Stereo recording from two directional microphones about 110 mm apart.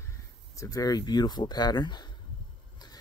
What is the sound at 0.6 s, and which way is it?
Speech, 35° left (ahead or behind).